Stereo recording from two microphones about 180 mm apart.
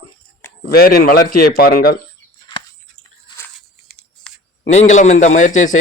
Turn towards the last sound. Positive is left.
turn(degrees=45)  # may be behind; listen again after turning